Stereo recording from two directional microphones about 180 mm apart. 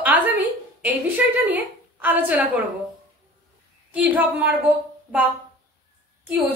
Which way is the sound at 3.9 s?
10° right (ahead or behind).